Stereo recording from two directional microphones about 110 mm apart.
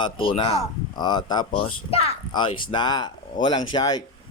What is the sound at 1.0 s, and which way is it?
Speech, 40° left (ahead or behind).